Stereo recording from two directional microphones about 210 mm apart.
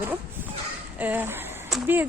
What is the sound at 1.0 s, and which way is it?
Speech, 10° right (ahead or behind).